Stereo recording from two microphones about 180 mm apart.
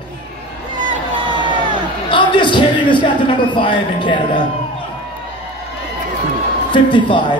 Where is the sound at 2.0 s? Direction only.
25° left (ahead or behind).